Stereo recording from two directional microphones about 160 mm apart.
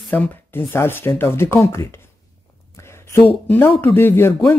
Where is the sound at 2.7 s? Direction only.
15° left (ahead or behind).